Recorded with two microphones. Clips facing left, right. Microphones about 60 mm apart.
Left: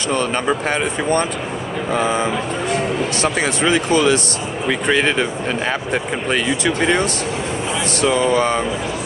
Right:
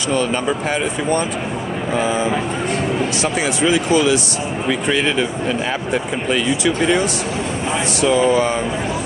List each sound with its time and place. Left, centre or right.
0.1 s speech: left
3.2 s speech: left
6.3 s speech: left